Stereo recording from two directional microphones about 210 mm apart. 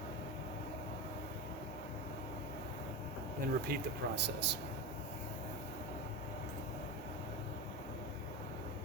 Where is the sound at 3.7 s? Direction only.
55° right (ahead or behind).